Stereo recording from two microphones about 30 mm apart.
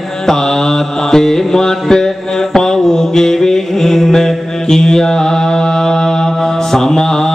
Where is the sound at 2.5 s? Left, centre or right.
Centre.